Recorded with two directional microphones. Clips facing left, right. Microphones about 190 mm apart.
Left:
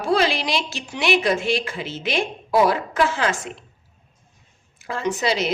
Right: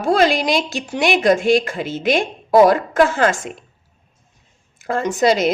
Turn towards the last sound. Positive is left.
turn(degrees=-45)  # may be behind; listen again after turning